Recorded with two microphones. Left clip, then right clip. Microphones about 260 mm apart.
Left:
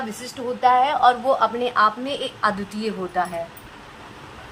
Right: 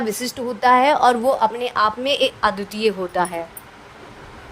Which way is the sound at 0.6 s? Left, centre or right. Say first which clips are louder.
Right 2 dB; right.